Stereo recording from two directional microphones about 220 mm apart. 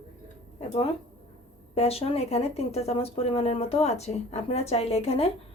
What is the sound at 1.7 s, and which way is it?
Speech, 30° left (ahead or behind).